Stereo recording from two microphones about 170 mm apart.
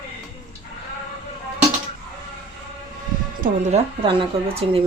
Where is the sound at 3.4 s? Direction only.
40° right (ahead or behind).